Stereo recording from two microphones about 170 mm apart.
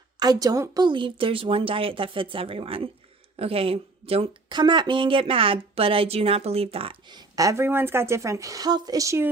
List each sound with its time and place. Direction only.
0.2 s a woman's voice: 20° right (ahead or behind)